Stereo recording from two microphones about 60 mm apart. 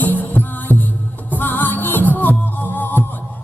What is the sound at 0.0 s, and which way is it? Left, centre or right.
Music, left.